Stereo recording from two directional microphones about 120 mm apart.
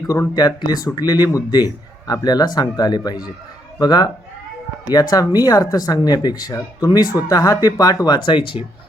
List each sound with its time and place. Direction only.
0.1 s a man's voice: 30° left (ahead or behind)